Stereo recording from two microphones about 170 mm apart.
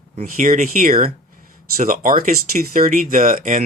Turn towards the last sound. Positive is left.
turn(degrees=-50)  # may be behind; listen again after turning